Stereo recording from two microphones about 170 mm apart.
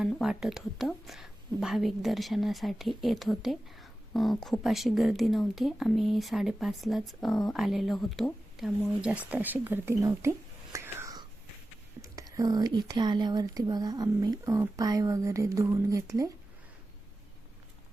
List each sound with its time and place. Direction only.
0.0 s a woman's voice: centre (ahead or behind); by 16.3 s 20° right (ahead or behind)